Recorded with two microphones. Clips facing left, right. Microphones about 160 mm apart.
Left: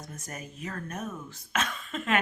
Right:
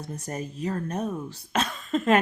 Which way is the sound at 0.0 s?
35° right (ahead or behind).